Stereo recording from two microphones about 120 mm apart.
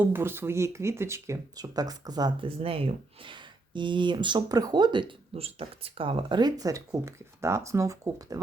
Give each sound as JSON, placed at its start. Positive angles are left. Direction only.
{"t": 0.0, "sound": "speech", "side_deg": -20}
{"t": 5.3, "sound": "speech", "side_deg": -55}